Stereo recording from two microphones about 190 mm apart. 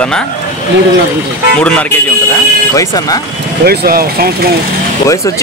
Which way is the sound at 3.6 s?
55° right (ahead or behind).